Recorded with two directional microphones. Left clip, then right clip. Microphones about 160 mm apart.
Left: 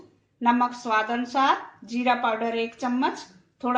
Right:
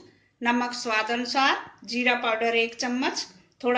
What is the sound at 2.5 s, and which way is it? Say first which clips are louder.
Speech: right 4 dB; 15° left (ahead or behind).